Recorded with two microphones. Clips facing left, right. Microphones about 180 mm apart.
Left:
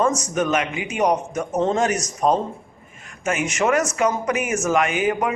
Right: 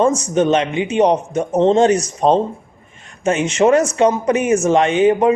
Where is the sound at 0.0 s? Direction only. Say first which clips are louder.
Right 6 dB; 30° right (ahead or behind).